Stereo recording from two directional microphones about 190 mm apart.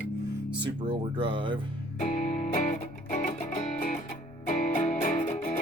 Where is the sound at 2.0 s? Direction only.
40° left (ahead or behind).